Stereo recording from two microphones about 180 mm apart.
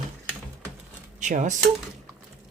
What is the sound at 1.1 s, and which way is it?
Speech, 45° right (ahead or behind).